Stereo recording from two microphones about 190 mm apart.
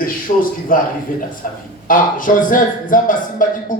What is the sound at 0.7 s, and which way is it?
Speech, 45° left (ahead or behind).